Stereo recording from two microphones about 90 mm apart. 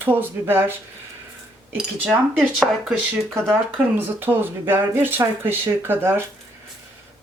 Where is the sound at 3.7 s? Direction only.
20° right (ahead or behind).